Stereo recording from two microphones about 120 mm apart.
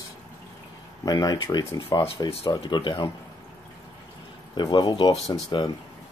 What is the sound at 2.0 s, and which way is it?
Speech, 25° left (ahead or behind).